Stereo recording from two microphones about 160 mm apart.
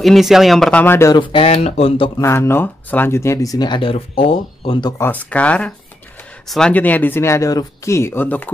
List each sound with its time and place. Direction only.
0.0 s speech: centre (ahead or behind); by 1.1 s 15° left (ahead or behind)
1.1 s speech: 30° left (ahead or behind)
2.2 s speech: 15° left (ahead or behind)
4.9 s speech: 10° left (ahead or behind)